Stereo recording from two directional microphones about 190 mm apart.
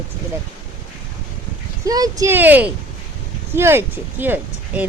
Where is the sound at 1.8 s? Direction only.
20° right (ahead or behind).